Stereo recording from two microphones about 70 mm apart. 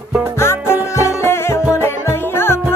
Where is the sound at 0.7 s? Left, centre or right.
Left.